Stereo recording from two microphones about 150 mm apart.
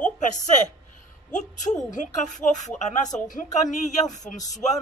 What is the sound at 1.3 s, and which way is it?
Speech, 55° left (ahead or behind).